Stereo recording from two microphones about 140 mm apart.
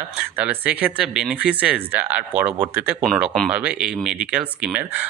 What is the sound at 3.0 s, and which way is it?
Speech, centre (ahead or behind).